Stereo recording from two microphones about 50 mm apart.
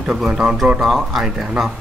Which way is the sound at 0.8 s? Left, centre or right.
Centre.